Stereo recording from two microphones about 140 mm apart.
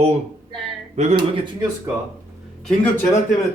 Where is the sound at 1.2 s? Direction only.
35° right (ahead or behind).